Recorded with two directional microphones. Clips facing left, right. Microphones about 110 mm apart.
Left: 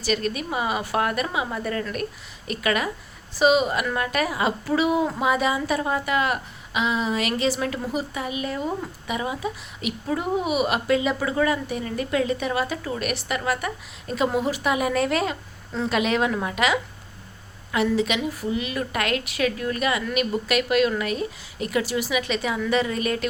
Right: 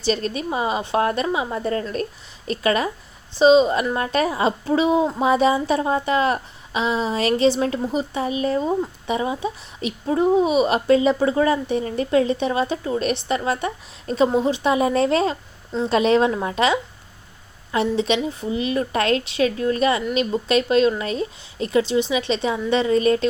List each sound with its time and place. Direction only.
0.0 s a woman's voice: 30° right (ahead or behind)